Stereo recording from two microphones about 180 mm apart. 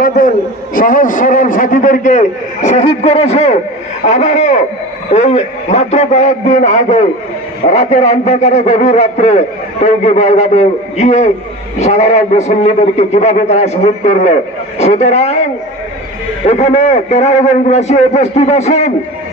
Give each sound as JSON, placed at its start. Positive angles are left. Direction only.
{"t": 0.0, "sound": "a man's voice", "side_deg": 50}
{"t": 16.4, "sound": "a man's voice", "side_deg": 35}